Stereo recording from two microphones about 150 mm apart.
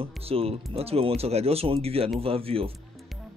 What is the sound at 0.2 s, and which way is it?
Speech, 40° right (ahead or behind).